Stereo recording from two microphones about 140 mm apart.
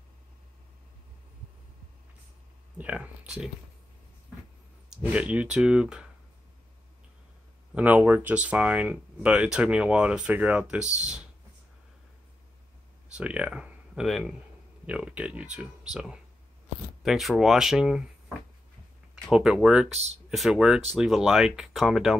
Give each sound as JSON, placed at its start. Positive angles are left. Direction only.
{"t": 2.8, "sound": "speech", "side_deg": -10}
{"t": 4.8, "sound": "speech", "side_deg": -5}
{"t": 7.7, "sound": "speech", "side_deg": -10}
{"t": 13.1, "sound": "speech", "side_deg": -10}
{"t": 19.2, "sound": "speech", "side_deg": -5}